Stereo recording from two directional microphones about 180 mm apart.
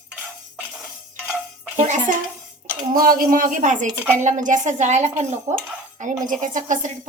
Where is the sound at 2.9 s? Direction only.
55° right (ahead or behind).